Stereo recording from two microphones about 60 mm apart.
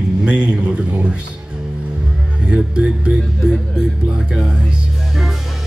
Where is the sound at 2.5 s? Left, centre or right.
Centre.